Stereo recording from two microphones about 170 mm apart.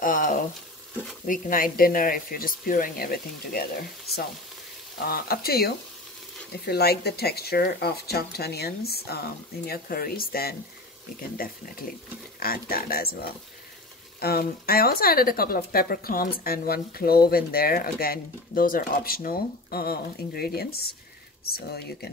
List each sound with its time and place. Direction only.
0.0 s speech: 50° left (ahead or behind)
4.9 s speech: 65° left (ahead or behind)